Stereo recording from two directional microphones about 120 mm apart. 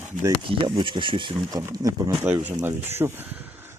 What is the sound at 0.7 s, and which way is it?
Speech, 40° right (ahead or behind).